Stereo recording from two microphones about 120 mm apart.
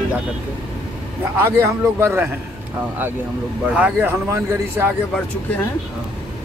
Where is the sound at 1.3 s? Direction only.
20° right (ahead or behind).